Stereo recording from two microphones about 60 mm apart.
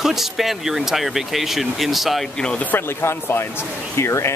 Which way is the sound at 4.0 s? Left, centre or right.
Left.